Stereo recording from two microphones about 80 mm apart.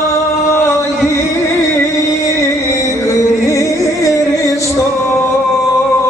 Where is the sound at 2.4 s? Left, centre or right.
Left.